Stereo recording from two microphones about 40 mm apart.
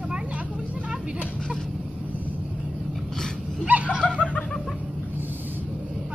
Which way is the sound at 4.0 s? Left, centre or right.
Left.